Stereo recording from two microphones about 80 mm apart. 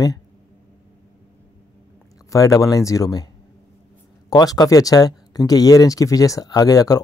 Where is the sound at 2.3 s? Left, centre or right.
Left.